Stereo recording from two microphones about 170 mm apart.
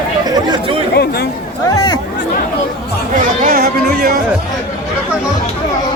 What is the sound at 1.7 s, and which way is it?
Chatter, 25° left (ahead or behind).